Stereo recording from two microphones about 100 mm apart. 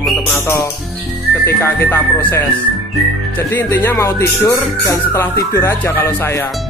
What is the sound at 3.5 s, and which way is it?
Speech, 20° left (ahead or behind).